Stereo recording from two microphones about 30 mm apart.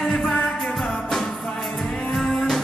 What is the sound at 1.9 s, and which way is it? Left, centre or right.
Music, left.